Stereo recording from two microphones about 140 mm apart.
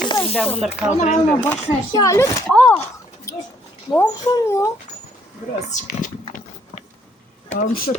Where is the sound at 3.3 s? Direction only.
20° left (ahead or behind).